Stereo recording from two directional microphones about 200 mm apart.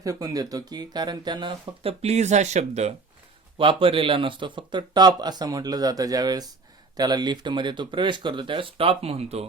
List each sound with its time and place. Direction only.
0.0 s speech: 15° right (ahead or behind)